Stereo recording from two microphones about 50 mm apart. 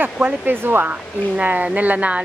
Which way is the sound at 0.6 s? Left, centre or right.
Right.